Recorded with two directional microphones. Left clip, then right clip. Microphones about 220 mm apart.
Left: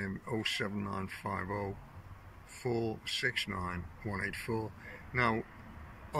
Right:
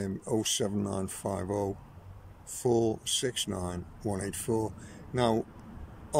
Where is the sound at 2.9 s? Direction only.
30° right (ahead or behind).